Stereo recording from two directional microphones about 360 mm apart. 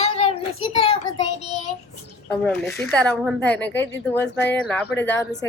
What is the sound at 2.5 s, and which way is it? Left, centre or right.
Speech, centre.